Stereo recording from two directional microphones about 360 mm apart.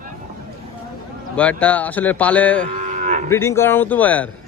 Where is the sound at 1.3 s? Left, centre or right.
Centre.